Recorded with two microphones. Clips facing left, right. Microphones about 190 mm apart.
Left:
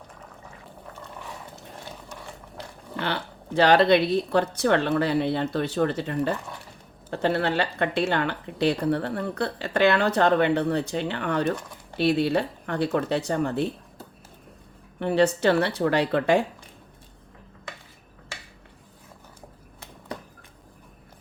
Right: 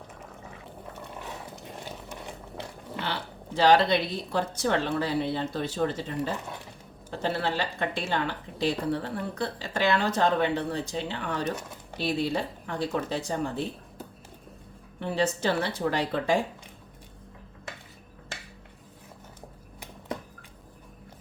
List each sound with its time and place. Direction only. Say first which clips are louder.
1.8 s a sound: even; 15° right (ahead or behind)
3.0 s speech: left 5 dB; 60° left (ahead or behind)
14.9 s speech: left 6 dB; 65° left (ahead or behind)